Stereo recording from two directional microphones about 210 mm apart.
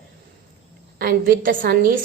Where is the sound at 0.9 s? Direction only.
45° right (ahead or behind).